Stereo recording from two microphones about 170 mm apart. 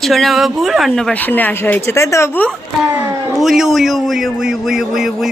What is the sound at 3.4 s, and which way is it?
Speech, centre (ahead or behind).